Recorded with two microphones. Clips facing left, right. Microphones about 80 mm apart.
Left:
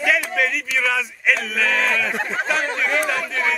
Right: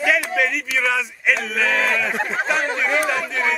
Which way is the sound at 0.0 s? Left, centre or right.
Centre.